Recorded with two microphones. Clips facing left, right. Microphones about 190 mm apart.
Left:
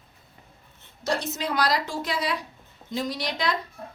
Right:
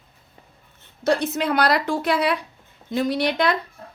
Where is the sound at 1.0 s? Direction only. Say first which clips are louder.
Right 7 dB; 60° right (ahead or behind).